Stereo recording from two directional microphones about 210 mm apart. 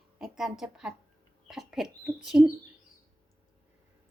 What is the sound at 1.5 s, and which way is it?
Rodents, centre (ahead or behind).